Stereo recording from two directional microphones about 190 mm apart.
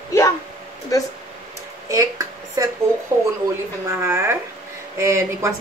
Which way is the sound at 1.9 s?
15° right (ahead or behind).